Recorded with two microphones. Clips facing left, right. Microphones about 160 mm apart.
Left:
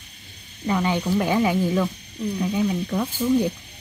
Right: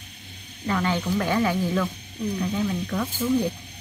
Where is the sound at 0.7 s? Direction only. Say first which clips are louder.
Left 2 dB; 15° left (ahead or behind).